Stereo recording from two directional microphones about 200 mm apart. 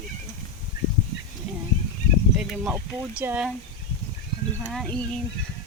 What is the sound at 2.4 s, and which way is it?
Speech, 5° right (ahead or behind).